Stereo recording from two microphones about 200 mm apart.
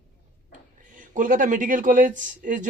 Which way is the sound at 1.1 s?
40° right (ahead or behind).